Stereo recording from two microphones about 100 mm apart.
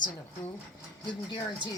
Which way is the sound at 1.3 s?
45° left (ahead or behind).